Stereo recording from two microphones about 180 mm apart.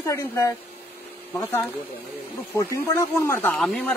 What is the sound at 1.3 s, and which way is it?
Speech, 15° left (ahead or behind).